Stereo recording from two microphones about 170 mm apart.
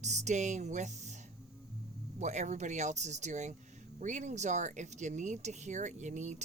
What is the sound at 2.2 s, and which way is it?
Speech, 45° right (ahead or behind).